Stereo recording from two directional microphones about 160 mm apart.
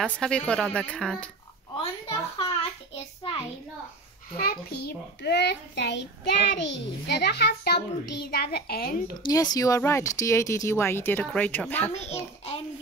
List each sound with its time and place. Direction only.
0.0 s a woman's voice: 5° left (ahead or behind)
1.8 s a sound: 35° left (ahead or behind)
4.4 s a child's voice: 75° left (ahead or behind)
9.2 s speech: 25° left (ahead or behind)
11.9 s a child's voice: 45° left (ahead or behind)